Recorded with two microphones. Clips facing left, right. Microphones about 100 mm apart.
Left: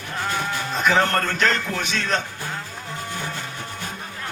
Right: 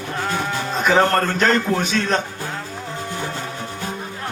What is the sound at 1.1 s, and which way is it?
Speech, 35° right (ahead or behind).